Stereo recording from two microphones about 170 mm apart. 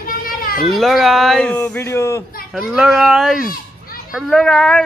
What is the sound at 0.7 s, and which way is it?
Speech, centre (ahead or behind).